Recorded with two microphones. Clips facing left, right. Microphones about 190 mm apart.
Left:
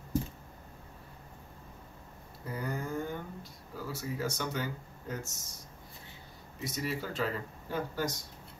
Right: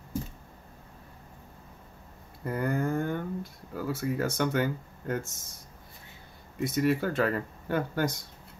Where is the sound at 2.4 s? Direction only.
60° right (ahead or behind).